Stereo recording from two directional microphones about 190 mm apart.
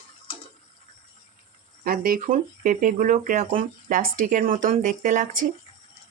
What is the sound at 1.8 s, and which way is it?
Speech, 50° right (ahead or behind).